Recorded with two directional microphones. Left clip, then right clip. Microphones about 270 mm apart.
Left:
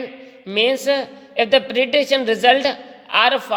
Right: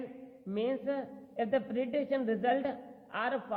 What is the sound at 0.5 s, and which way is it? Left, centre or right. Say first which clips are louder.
A woman's voice: left 16 dB; left.